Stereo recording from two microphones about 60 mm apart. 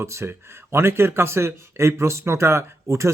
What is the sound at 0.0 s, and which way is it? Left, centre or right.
Speech, right.